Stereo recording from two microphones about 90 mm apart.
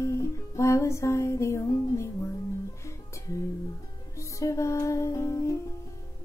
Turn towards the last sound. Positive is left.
turn(degrees=35)  # may be behind; listen again after turning